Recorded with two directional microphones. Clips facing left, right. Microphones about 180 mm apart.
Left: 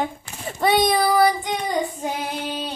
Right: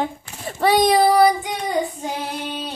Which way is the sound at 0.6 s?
35° right (ahead or behind).